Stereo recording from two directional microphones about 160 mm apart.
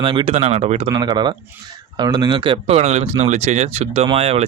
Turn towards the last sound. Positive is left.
turn(degrees=-40)  # may be behind; listen again after turning